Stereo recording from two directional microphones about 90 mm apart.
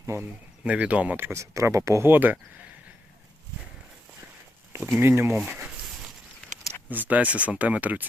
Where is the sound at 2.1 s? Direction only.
20° right (ahead or behind).